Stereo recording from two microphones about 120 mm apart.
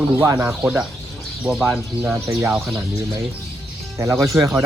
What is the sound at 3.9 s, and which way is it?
Speech, 25° right (ahead or behind).